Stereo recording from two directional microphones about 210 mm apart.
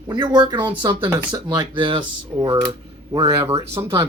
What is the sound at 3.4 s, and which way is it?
Speech, 10° right (ahead or behind).